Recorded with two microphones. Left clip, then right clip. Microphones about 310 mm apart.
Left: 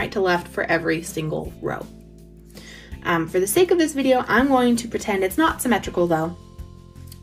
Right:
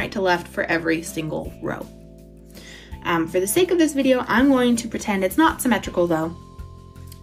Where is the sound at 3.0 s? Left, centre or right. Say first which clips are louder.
Even; centre.